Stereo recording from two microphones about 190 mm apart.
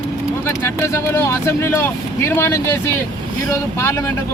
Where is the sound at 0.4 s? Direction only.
15° left (ahead or behind).